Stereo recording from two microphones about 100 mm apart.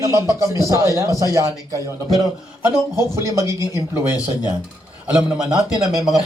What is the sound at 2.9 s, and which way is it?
Speech, 30° right (ahead or behind).